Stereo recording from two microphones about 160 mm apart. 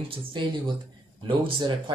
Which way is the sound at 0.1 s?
30° right (ahead or behind).